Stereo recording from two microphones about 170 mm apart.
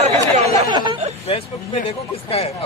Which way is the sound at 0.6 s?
25° right (ahead or behind).